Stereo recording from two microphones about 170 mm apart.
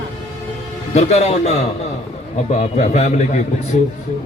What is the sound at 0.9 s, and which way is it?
Speech, 40° left (ahead or behind).